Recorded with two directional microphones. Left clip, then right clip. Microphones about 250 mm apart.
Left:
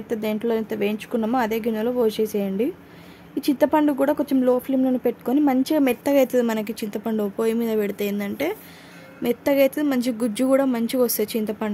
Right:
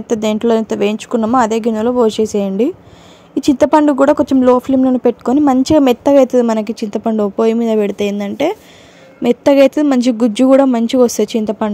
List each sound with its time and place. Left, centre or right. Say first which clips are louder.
0.0 s speech: right 10 dB; right